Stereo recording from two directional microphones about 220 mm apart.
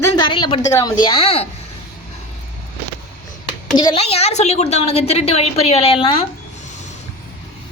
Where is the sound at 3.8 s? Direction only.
25° left (ahead or behind).